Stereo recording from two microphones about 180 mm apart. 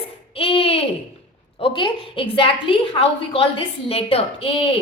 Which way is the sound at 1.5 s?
30° left (ahead or behind).